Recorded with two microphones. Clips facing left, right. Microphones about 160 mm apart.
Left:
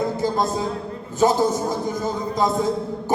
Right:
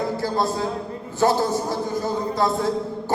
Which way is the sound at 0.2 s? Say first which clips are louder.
Left 1 dB; 20° left (ahead or behind).